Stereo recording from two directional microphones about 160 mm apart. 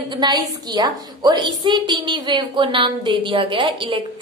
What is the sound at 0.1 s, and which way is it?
A woman's voice, 25° right (ahead or behind).